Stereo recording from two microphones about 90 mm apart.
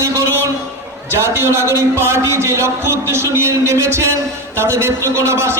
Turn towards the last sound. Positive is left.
turn(degrees=-30)  # may be behind; listen again after turning